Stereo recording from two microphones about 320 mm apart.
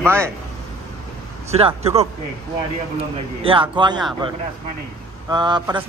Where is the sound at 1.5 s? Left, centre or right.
Centre.